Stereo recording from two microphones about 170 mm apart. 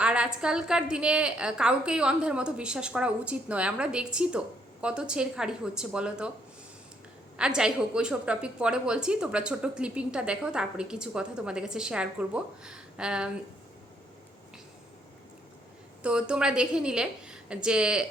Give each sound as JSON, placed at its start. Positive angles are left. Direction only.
{"t": 0.0, "sound": "a woman's voice", "side_deg": -5}
{"t": 7.3, "sound": "a woman's voice", "side_deg": -5}
{"t": 16.0, "sound": "a woman's voice", "side_deg": -5}